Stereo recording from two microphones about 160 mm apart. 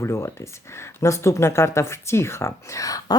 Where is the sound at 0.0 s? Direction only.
15° left (ahead or behind).